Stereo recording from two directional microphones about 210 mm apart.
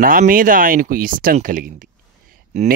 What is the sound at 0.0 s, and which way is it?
Speech, 40° right (ahead or behind).